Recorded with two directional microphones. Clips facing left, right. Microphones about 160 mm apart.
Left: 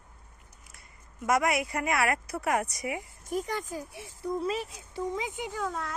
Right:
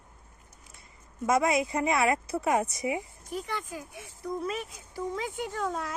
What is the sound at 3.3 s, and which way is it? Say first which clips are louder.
Speech: left 3 dB; 40° left (ahead or behind).